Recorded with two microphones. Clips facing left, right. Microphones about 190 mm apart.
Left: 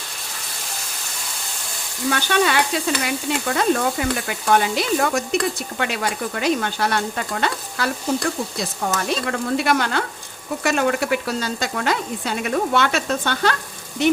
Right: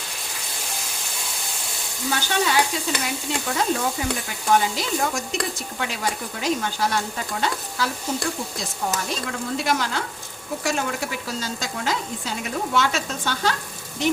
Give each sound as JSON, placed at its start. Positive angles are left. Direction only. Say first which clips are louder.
{"t": 2.0, "sound": "sizzle", "louder": "left 4 dB", "side_deg": 65}